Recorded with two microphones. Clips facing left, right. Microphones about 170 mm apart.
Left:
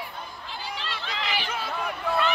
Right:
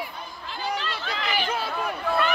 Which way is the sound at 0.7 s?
50° right (ahead or behind).